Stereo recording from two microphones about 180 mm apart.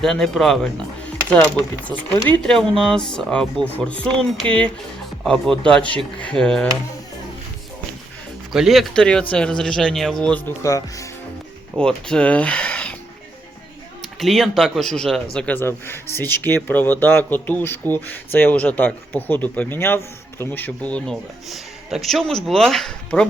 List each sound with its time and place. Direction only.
0.0 s a man's voice: centre (ahead or behind)
8.5 s a man's voice: centre (ahead or behind)
10.6 s speech: 20° left (ahead or behind)
11.8 s speech: 5° left (ahead or behind)
14.0 s a man's voice: centre (ahead or behind)